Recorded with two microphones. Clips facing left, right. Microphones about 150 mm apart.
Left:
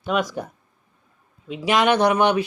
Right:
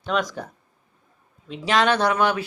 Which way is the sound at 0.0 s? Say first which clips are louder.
Left 2 dB; 10° left (ahead or behind).